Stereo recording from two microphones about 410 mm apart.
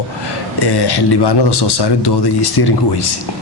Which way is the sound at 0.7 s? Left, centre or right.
Left.